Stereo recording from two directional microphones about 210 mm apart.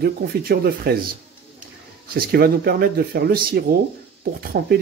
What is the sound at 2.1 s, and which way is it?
Speech, 45° right (ahead or behind).